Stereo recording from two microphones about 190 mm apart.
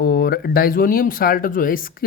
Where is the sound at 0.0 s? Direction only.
55° left (ahead or behind).